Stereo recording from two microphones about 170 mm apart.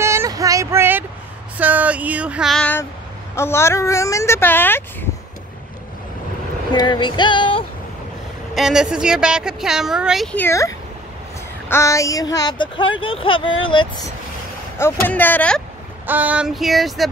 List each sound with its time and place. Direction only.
0.0 s a sound: 15° right (ahead or behind)
1.6 s speech: 10° right (ahead or behind)
2.6 s a woman's voice: 10° left (ahead or behind)
6.7 s speech: 25° left (ahead or behind)
8.5 s a woman's voice: 5° right (ahead or behind)
10.3 s a woman's voice: 15° left (ahead or behind); by 13.8 s 30° left (ahead or behind)
14.8 s a woman's voice: 10° left (ahead or behind)
16.1 s a woman's voice: 10° right (ahead or behind)